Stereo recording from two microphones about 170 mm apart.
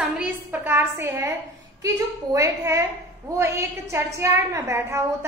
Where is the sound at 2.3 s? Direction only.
20° right (ahead or behind).